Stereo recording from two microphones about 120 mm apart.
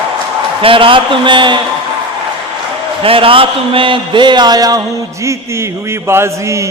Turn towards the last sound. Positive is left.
turn(degrees=-20)  # may be behind; listen again after turning